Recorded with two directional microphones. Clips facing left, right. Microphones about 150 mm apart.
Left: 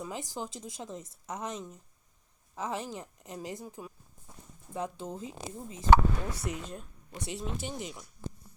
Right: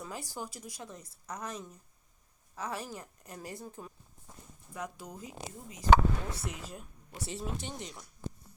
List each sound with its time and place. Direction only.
0.0 s a woman's voice: 20° left (ahead or behind)
4.7 s a woman's voice: 25° left (ahead or behind)
6.3 s speech: centre (ahead or behind)